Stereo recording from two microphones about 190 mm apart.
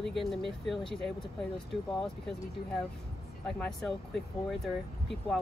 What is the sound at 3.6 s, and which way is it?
Speech, centre (ahead or behind).